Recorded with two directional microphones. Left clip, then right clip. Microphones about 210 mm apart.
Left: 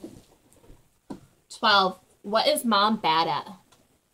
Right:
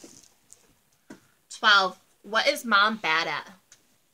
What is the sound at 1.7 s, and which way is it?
Speech, 30° right (ahead or behind).